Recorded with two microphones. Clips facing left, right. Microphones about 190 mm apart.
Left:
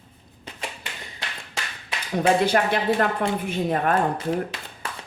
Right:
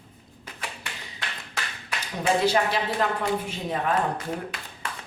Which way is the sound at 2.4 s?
55° left (ahead or behind).